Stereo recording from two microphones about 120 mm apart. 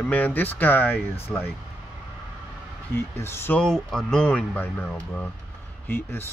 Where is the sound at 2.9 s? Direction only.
20° left (ahead or behind).